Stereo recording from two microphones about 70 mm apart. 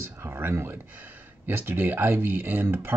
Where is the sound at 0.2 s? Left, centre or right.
Right.